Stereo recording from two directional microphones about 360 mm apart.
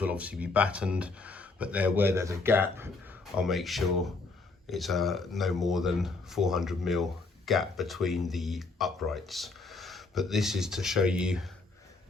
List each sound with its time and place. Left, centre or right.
0.0 s speech: centre